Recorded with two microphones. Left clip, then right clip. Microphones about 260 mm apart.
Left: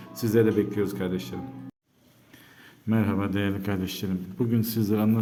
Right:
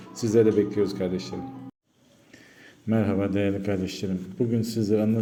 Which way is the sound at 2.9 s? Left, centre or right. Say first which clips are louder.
Right 2 dB; centre.